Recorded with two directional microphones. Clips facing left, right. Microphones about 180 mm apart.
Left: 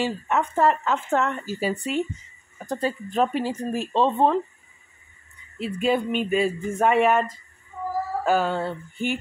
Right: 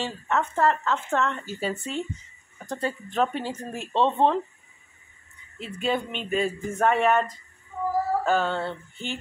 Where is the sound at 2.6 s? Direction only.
15° left (ahead or behind).